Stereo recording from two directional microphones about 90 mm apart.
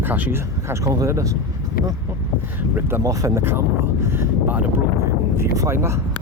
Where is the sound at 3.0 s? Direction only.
40° right (ahead or behind).